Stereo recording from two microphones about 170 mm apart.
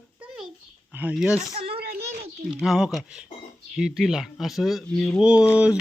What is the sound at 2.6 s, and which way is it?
Speech, centre (ahead or behind).